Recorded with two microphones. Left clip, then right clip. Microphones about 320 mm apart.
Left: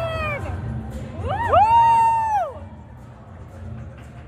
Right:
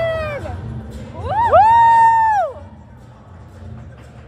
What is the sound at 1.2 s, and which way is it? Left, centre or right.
Vehicle, right.